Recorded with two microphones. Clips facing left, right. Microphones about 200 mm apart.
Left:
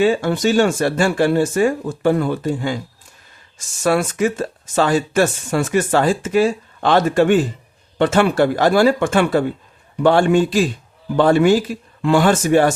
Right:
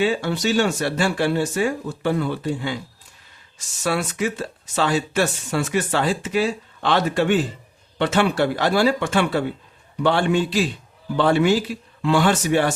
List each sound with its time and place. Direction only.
0.0 s speech: 45° left (ahead or behind)
3.8 s speech: 50° left (ahead or behind)